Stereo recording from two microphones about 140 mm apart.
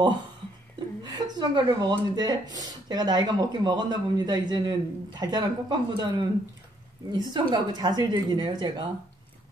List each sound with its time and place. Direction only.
1.0 s speech: 30° right (ahead or behind)